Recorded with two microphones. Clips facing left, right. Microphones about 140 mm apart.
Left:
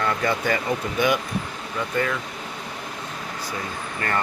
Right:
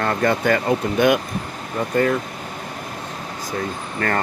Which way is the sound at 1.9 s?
40° right (ahead or behind).